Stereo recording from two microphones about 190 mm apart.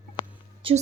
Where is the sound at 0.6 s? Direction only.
30° right (ahead or behind).